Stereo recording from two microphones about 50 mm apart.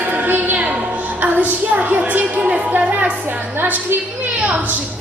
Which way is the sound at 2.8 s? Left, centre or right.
Right.